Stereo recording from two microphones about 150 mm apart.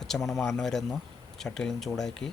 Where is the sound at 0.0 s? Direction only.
Centre (ahead or behind).